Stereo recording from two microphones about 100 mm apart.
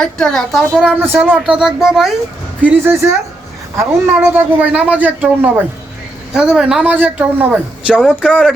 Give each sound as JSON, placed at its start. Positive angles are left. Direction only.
{"t": 0.0, "sound": "a woman's voice", "side_deg": 5}
{"t": 0.9, "sound": "a woman's voice", "side_deg": -20}
{"t": 1.4, "sound": "a woman's voice", "side_deg": -5}
{"t": 2.6, "sound": "a woman's voice", "side_deg": -20}